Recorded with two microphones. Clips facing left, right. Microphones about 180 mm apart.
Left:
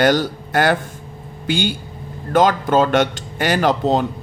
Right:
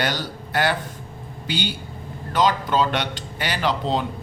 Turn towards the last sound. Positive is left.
turn(degrees=45)  # may be behind; listen again after turning